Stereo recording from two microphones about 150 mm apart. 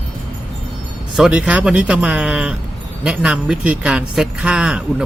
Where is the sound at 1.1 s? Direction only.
5° right (ahead or behind).